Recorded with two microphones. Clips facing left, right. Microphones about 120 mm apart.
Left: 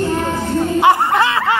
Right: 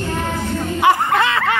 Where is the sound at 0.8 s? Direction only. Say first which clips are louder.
Left 1 dB; 25° left (ahead or behind).